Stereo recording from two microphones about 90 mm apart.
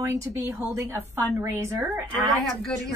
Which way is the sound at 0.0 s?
35° right (ahead or behind).